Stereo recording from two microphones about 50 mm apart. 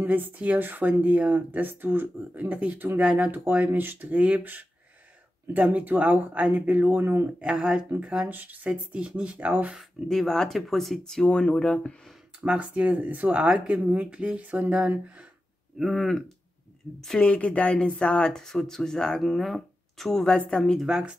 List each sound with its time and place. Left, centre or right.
0.0 s speech: right
2.3 s speech: right
7.0 s speech: right
8.0 s speech: right
8.3 s speech: right
8.7 s speech: right
10.0 s speech: centre
11.2 s speech: left
12.5 s speech: right
15.8 s speech: centre
17.2 s speech: left
19.2 s speech: centre
20.2 s speech: centre
20.8 s speech: centre